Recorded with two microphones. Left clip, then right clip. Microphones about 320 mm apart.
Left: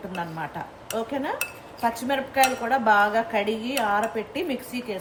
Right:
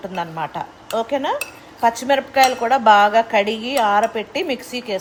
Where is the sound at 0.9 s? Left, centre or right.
Right.